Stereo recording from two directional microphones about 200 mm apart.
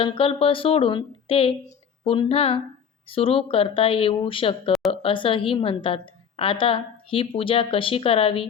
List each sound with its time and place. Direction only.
0.0 s a woman's voice: 25° left (ahead or behind)